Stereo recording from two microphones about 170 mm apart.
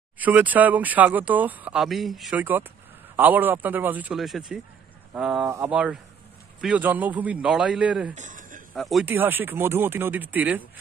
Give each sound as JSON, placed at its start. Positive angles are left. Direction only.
{"t": 0.2, "sound": "speech", "side_deg": -10}
{"t": 8.1, "sound": "a sound", "side_deg": -45}
{"t": 8.7, "sound": "speech", "side_deg": 0}
{"t": 9.0, "sound": "speech", "side_deg": -10}